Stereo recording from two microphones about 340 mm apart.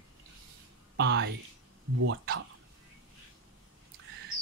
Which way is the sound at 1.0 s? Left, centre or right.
Right.